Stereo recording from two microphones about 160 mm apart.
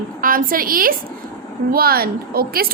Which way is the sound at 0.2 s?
60° right (ahead or behind).